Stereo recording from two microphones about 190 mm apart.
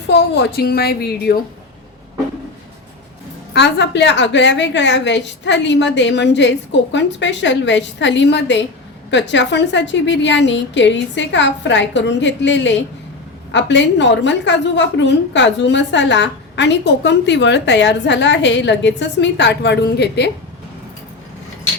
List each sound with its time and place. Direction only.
0.1 s a woman's voice: 60° left (ahead or behind)
3.5 s a woman's voice: 65° left (ahead or behind)